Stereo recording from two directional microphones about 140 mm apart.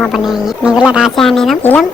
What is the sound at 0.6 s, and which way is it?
Speech, 5° right (ahead or behind).